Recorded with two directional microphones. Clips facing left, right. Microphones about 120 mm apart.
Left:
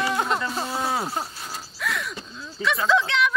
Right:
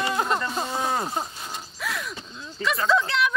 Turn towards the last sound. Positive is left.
turn(degrees=0)  # may be behind; listen again after turning